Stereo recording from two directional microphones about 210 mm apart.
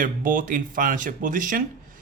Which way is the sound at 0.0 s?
40° right (ahead or behind).